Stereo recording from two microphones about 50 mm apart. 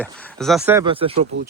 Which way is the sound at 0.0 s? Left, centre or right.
Left.